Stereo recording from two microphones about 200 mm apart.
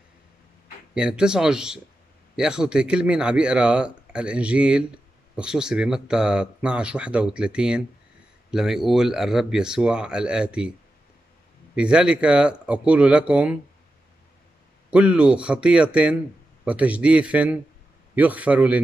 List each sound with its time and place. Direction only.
0.9 s a man's voice: 5° right (ahead or behind)
11.7 s a man's voice: 5° right (ahead or behind)
14.9 s a man's voice: 5° right (ahead or behind)